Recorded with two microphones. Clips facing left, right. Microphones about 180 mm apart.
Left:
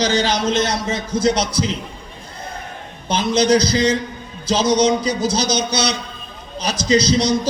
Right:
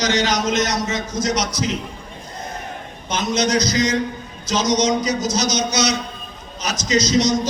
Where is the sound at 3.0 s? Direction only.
30° left (ahead or behind).